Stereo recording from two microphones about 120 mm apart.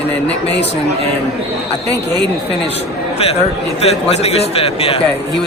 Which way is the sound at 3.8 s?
60° left (ahead or behind).